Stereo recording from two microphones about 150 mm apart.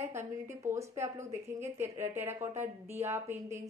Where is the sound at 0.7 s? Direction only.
20° right (ahead or behind).